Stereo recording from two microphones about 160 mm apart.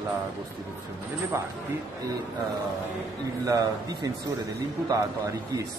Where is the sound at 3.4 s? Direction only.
20° right (ahead or behind).